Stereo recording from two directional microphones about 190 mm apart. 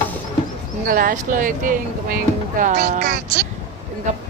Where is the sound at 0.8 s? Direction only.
50° right (ahead or behind).